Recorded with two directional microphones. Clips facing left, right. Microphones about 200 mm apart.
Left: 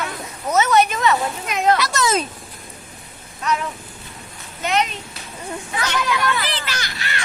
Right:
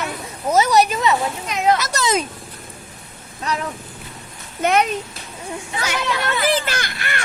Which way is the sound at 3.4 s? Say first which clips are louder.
Left 2 dB; 35° right (ahead or behind).